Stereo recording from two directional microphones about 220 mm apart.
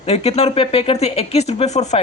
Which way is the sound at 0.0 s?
30° left (ahead or behind).